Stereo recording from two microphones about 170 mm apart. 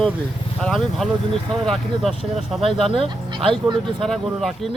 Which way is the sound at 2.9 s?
30° right (ahead or behind).